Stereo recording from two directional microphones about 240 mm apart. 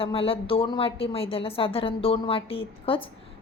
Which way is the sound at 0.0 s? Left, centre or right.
Left.